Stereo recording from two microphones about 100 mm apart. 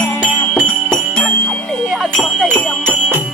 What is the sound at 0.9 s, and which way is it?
Jingle bell, 10° left (ahead or behind).